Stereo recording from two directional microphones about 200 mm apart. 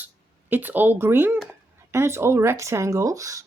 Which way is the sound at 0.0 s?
10° right (ahead or behind).